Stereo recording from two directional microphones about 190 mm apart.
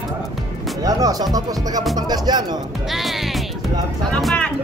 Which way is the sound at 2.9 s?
Centre (ahead or behind).